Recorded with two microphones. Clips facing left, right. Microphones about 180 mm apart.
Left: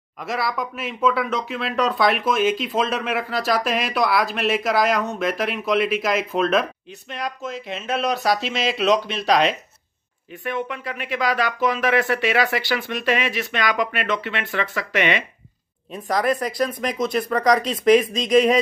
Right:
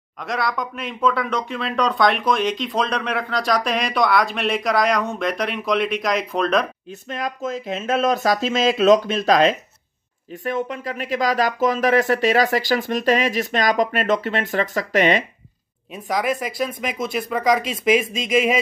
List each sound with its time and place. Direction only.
0.2 s speech: 5° left (ahead or behind)
6.9 s speech: 45° right (ahead or behind)
15.9 s speech: 5° right (ahead or behind)